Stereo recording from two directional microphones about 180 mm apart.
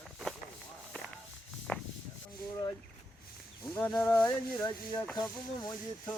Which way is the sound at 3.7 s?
10° left (ahead or behind).